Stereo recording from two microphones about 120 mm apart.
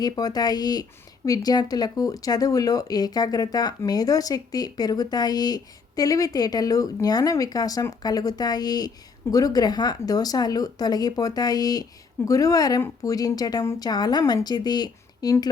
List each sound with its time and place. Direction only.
0.0 s speech: 30° left (ahead or behind)